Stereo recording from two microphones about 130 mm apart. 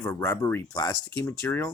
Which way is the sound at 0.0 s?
25° left (ahead or behind).